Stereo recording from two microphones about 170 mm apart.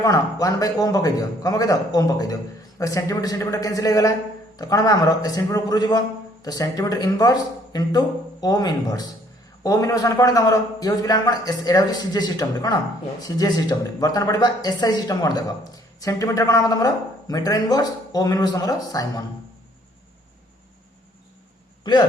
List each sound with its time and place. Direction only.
0.0 s speech: 20° left (ahead or behind)